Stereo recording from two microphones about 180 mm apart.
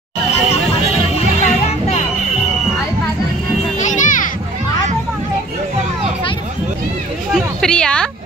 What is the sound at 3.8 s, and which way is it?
Children playing, 45° left (ahead or behind).